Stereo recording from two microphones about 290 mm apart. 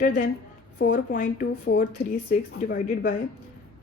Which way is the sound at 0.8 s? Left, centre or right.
Left.